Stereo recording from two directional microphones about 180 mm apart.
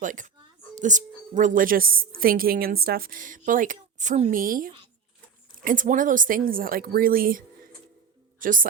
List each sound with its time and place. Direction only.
0.0 s speech: 45° right (ahead or behind)